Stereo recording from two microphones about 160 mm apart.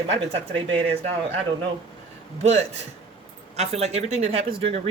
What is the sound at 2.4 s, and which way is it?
Speech, 40° right (ahead or behind).